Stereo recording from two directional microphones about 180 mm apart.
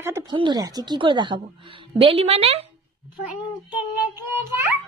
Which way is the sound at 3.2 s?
10° right (ahead or behind).